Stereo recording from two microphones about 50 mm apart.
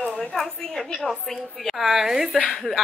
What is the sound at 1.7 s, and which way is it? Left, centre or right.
Speech, centre.